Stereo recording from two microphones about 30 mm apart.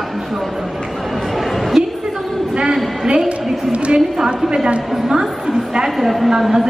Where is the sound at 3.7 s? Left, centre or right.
Right.